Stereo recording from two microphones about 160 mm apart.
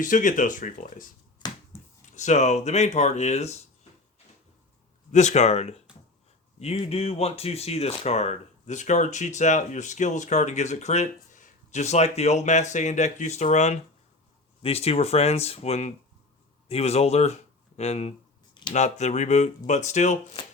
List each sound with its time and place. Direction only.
0.0 s speech: 55° left (ahead or behind)
1.7 s a sound: 15° left (ahead or behind)
2.1 s speech: 45° left (ahead or behind)
5.1 s speech: 45° left (ahead or behind)